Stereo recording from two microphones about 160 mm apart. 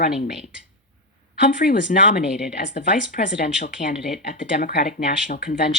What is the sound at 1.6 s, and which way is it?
Speech, 80° left.